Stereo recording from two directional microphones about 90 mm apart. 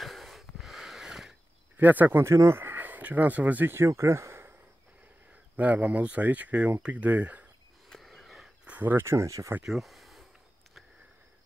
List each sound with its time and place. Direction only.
0.0 s wheeze: centre (ahead or behind)
1.8 s speech: 20° right (ahead or behind)
5.6 s speech: 20° right (ahead or behind)
7.9 s a sound: 5° left (ahead or behind)
8.6 s speech: 20° right (ahead or behind); by 9.6 s 35° right (ahead or behind)
9.6 s speech: centre (ahead or behind)